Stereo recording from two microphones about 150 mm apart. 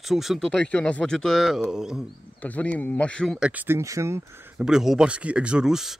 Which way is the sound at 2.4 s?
10° left (ahead or behind).